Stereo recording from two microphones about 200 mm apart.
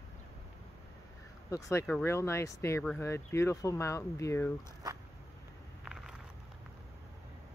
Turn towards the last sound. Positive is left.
turn(degrees=-5)  # may be behind; listen again after turning